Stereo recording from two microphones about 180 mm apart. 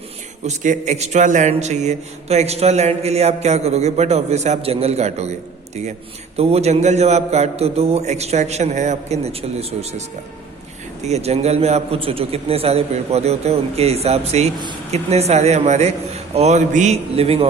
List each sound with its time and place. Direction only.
0.4 s a man's voice: 40° right (ahead or behind)
6.3 s a man's voice: 35° right (ahead or behind)
11.0 s a man's voice: 35° right (ahead or behind)